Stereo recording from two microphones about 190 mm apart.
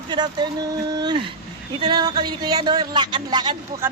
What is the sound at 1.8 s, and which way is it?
Speech, 20° right (ahead or behind).